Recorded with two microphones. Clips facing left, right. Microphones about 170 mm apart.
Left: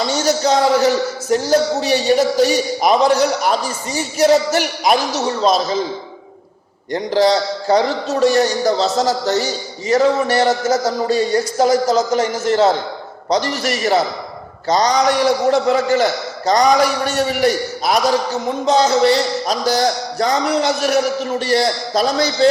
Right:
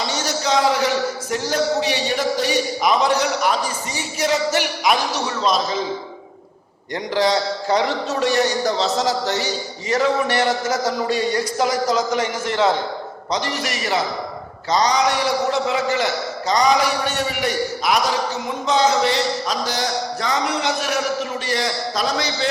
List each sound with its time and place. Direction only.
0.4 s speech: 40° left (ahead or behind)
6.9 s a man's voice: 35° left (ahead or behind)